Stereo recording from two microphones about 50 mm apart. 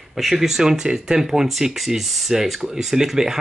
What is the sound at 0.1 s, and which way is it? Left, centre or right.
Speech, centre.